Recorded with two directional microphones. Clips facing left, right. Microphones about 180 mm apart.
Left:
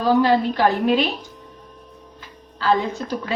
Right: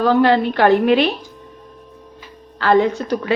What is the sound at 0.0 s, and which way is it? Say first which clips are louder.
A woman's voice: right 3 dB; 65° right (ahead or behind).